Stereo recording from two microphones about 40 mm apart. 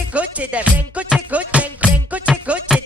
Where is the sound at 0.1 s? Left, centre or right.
Right.